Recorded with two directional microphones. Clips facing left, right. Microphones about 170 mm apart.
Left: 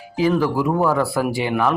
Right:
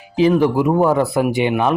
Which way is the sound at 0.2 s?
25° right (ahead or behind).